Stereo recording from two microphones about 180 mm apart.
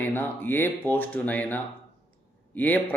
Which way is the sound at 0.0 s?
10° left (ahead or behind).